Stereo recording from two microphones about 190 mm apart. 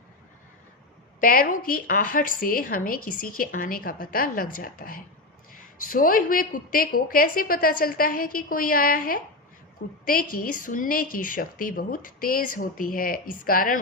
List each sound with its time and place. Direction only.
1.2 s a woman's voice: 50° left (ahead or behind)